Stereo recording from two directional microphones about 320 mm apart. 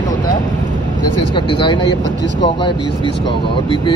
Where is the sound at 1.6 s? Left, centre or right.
Centre.